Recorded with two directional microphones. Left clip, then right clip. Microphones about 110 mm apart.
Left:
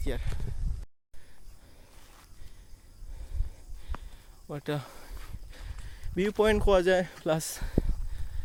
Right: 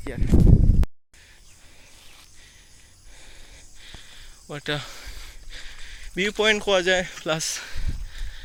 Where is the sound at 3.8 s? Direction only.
20° left (ahead or behind).